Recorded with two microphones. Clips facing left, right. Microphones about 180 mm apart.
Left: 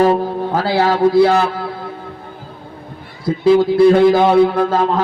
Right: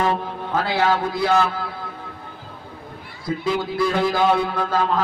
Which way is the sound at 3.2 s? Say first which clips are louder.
Left 11 dB; 30° left (ahead or behind).